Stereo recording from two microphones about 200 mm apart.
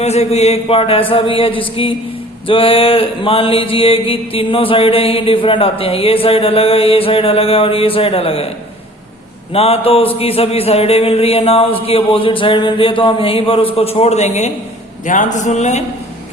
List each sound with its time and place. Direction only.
0.0 s mantra: 35° left (ahead or behind)
9.5 s mantra: 30° left (ahead or behind)
15.0 s speech: 40° left (ahead or behind)